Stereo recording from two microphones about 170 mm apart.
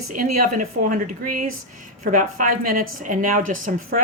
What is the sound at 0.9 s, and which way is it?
A woman's voice, 50° right (ahead or behind).